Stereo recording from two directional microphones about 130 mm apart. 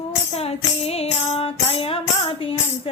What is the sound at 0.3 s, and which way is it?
Speech, 50° left (ahead or behind).